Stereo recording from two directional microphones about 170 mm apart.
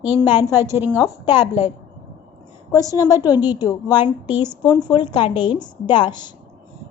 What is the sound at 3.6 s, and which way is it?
A woman's voice, 25° left (ahead or behind).